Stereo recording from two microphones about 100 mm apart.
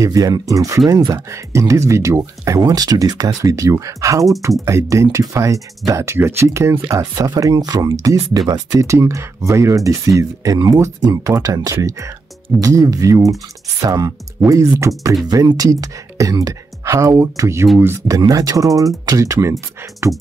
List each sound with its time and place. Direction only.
0.0 s speech: 35° right (ahead or behind)
18.3 s speech: 35° right (ahead or behind)